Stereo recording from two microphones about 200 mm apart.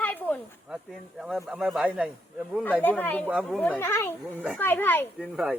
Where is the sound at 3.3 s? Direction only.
5° right (ahead or behind).